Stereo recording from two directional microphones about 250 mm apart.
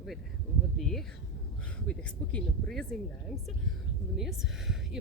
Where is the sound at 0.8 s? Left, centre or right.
Centre.